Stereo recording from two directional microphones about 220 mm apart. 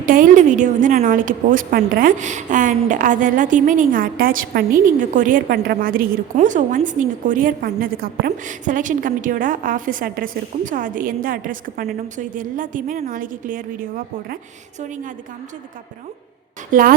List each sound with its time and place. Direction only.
0.0 s a woman's voice: 40° right (ahead or behind)
16.7 s a woman's voice: 40° right (ahead or behind)